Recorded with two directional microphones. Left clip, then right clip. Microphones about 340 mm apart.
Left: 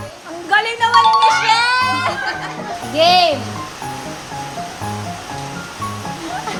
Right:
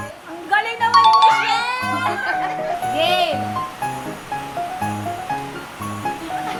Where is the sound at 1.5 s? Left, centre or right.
Left.